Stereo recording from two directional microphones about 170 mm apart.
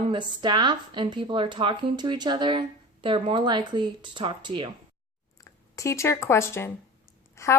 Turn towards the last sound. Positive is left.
turn(degrees=15)  # may be behind; listen again after turning